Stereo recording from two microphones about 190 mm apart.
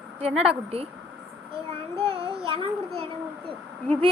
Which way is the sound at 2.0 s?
30° right (ahead or behind).